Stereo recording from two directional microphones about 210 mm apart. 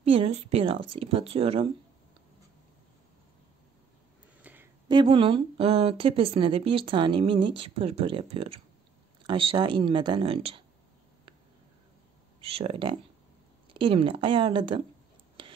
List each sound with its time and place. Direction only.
0.0 s speech: 30° right (ahead or behind)
4.4 s a sound: 10° right (ahead or behind)
4.8 s speech: 25° right (ahead or behind)
12.4 s speech: 30° right (ahead or behind)